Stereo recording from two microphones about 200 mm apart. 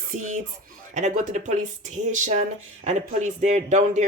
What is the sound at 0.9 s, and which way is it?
Speech, 40° right (ahead or behind).